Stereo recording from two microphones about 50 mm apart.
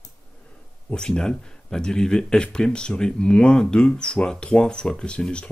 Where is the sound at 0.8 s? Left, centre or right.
Centre.